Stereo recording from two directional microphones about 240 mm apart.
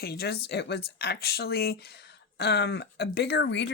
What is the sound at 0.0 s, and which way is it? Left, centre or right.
Speech, left.